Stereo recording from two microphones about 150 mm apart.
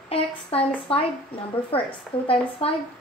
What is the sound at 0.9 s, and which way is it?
A woman's voice, 40° left (ahead or behind).